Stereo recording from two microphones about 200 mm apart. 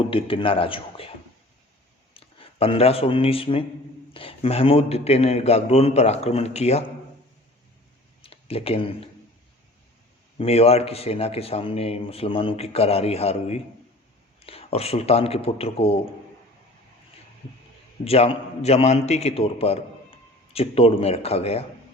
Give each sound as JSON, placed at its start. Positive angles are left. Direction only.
{"t": 0.1, "sound": "a man's voice", "side_deg": 25}
{"t": 2.1, "sound": "a man's voice", "side_deg": 25}
{"t": 8.2, "sound": "speech", "side_deg": 30}
{"t": 10.3, "sound": "a man's voice", "side_deg": 30}
{"t": 18.0, "sound": "a man's voice", "side_deg": 30}